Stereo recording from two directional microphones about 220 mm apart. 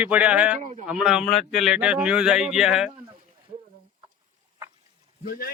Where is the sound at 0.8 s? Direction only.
5° right (ahead or behind).